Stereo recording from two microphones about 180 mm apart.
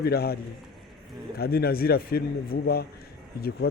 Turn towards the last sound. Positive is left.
turn(degrees=60)  # may be behind; listen again after turning